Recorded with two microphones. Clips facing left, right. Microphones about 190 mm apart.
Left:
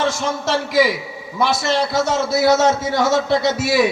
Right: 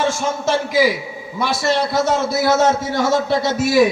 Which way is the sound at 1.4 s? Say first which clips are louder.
Even; 55° right (ahead or behind).